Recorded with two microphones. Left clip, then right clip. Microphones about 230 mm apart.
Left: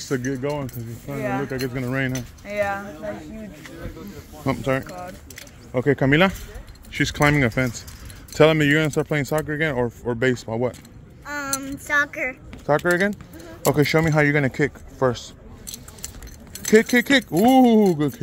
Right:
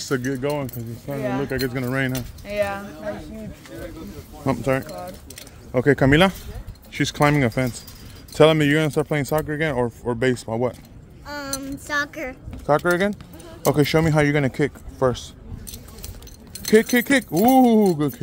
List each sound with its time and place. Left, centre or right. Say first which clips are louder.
0.0 s speech: right 1 dB; centre
4.5 s speech: right 1 dB; centre
5.7 s speech: right 2 dB; centre
11.2 s child singing: left 2 dB; centre
12.6 s speech: even; centre
16.6 s speech: left 1 dB; centre